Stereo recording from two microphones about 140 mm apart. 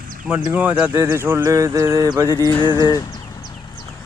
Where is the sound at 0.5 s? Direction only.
10° right (ahead or behind).